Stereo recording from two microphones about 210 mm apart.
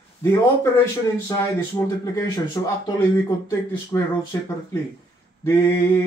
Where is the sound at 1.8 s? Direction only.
15° left (ahead or behind).